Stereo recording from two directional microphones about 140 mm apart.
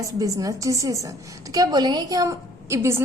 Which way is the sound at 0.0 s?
25° right (ahead or behind).